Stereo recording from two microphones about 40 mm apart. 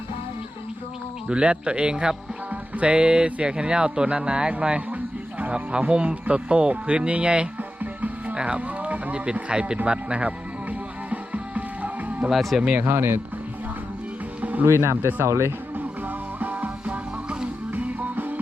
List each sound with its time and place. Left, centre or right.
1.3 s speech: right
7.8 s music: right
8.4 s speech: right
9.2 s speech: right
9.8 s music: right
12.3 s speech: centre
12.8 s speech: right
14.6 s speech: right
16.4 s music: right
16.8 s music: right
17.7 s music: right